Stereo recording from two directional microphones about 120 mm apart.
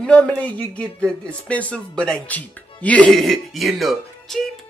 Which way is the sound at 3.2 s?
Centre (ahead or behind).